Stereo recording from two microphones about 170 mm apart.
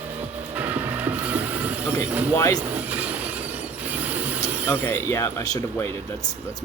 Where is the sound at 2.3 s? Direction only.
15° left (ahead or behind).